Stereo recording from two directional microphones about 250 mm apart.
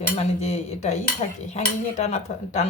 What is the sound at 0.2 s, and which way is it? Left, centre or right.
Speech, left.